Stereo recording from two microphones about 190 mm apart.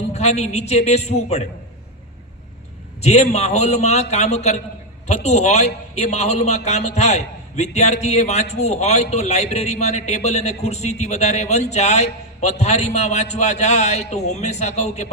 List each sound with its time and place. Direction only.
0.1 s a man's voice: 35° left (ahead or behind)
3.0 s a man's voice: 35° left (ahead or behind)